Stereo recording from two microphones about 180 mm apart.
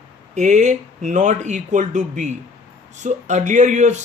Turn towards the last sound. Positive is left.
turn(degrees=-40)  # may be behind; listen again after turning